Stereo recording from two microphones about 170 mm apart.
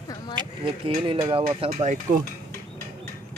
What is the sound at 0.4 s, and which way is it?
Speech, 30° right (ahead or behind).